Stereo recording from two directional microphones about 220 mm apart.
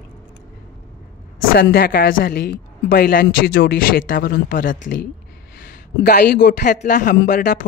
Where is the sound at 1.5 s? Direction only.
45° left (ahead or behind).